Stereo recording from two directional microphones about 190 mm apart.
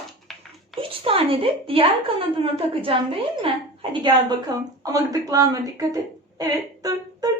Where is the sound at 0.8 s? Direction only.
30° right (ahead or behind).